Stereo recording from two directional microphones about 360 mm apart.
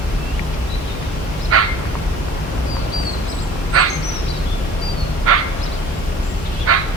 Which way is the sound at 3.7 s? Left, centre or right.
Right.